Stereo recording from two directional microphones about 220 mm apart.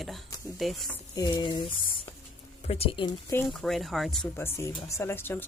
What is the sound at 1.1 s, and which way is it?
Speech, 15° left (ahead or behind).